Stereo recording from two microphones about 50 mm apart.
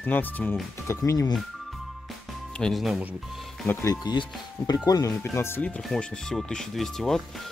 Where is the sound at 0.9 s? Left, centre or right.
Left.